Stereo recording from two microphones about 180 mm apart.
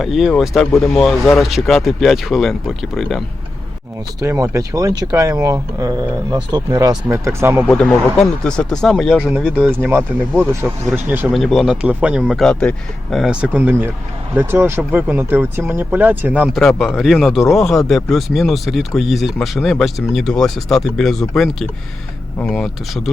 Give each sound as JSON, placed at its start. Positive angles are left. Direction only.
{"t": 0.0, "sound": "speech", "side_deg": 0}
{"t": 4.2, "sound": "speech", "side_deg": -15}
{"t": 7.7, "sound": "speech", "side_deg": 5}